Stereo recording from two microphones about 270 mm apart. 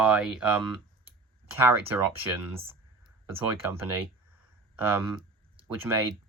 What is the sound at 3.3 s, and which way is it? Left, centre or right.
Speech, centre.